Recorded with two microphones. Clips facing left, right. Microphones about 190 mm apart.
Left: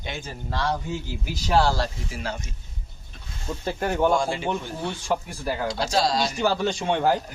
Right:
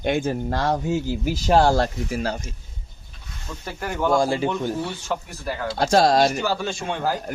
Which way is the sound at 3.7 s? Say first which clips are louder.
Left 3 dB; 30° left (ahead or behind).